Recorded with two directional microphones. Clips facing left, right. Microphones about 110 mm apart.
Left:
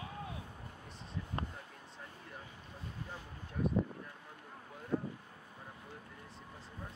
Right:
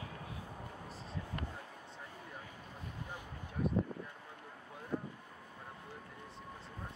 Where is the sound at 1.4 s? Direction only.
35° left (ahead or behind).